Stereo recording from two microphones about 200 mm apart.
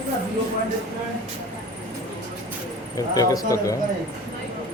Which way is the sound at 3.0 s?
15° left (ahead or behind).